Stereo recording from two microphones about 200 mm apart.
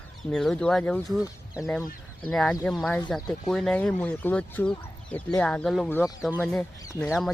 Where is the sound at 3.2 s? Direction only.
20° left (ahead or behind).